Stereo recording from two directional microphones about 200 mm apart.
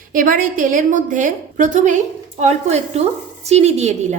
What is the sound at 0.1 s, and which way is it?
Speech, 45° right (ahead or behind).